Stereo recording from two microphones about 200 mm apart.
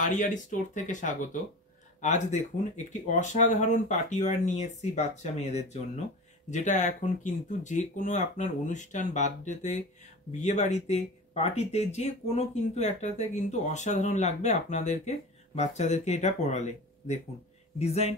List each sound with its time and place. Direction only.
0.0 s speech: 40° left (ahead or behind)